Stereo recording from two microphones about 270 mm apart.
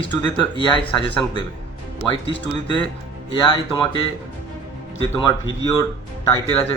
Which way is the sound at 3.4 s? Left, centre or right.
Centre.